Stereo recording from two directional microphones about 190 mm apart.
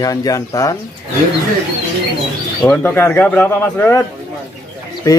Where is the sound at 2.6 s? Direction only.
10° left (ahead or behind).